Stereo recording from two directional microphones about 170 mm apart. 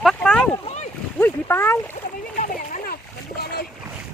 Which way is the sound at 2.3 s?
50° left (ahead or behind).